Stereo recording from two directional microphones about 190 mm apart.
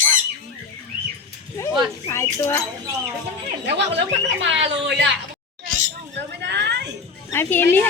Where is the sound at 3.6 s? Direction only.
65° right (ahead or behind).